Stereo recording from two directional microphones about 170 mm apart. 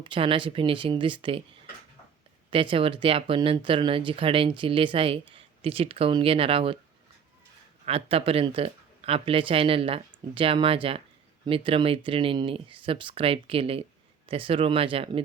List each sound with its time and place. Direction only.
0.0 s speech: 30° right (ahead or behind)
2.5 s speech: 30° right (ahead or behind)
7.9 s speech: 35° right (ahead or behind)